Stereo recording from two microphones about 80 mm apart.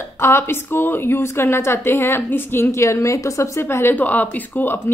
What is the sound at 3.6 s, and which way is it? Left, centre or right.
A woman's voice, left.